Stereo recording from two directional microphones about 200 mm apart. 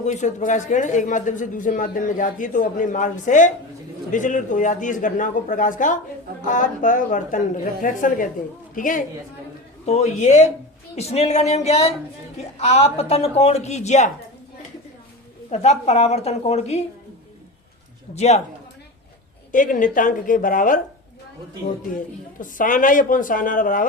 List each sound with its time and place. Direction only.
0.0 s a woman's voice: 35° left (ahead or behind)
15.4 s speech: 35° left (ahead or behind)
18.1 s speech: 35° left (ahead or behind)
19.5 s speech: 40° left (ahead or behind)
21.9 s speech: 45° left (ahead or behind)